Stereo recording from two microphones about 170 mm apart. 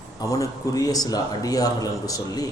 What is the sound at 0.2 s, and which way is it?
A man's voice, 20° left (ahead or behind).